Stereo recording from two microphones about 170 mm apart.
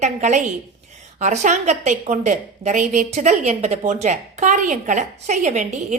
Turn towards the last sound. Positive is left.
turn(degrees=-45)  # may be behind; listen again after turning